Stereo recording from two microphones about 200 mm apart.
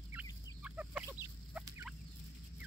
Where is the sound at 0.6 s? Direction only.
5° right (ahead or behind).